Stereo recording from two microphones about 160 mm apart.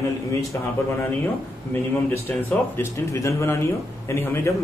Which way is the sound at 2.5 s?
15° left (ahead or behind).